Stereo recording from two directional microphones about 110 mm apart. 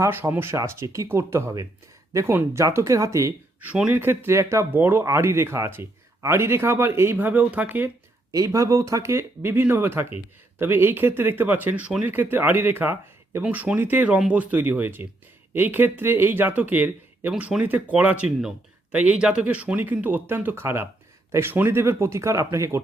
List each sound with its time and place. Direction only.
0.0 s speech: 20° right (ahead or behind)
3.6 s speech: 15° right (ahead or behind)
8.3 s speech: 30° right (ahead or behind)